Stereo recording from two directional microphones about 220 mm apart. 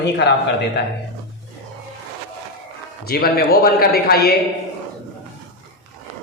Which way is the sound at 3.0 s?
45° left (ahead or behind).